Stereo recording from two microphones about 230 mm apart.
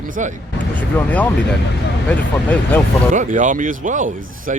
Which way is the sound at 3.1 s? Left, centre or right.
Right.